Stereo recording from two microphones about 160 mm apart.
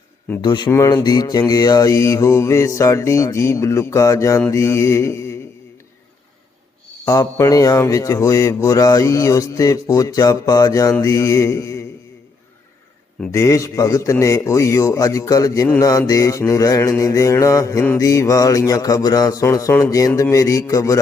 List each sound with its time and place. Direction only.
0.4 s speech: 25° left (ahead or behind)
7.0 s speech: 20° left (ahead or behind)
13.3 s speech: 20° left (ahead or behind)